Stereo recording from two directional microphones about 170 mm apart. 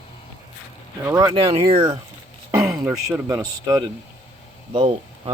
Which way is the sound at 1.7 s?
35° right (ahead or behind).